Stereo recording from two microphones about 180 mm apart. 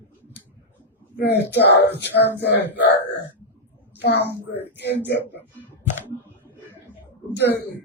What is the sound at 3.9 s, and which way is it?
Speech, 70° left (ahead or behind).